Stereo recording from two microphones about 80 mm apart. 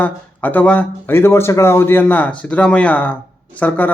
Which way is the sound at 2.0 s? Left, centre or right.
Centre.